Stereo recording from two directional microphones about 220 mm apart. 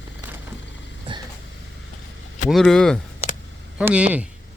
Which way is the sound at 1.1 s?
20° right (ahead or behind).